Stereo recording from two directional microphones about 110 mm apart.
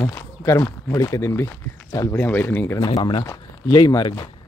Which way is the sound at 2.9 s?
50° left (ahead or behind).